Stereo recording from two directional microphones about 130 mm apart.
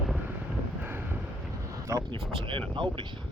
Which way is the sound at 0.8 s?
15° right (ahead or behind).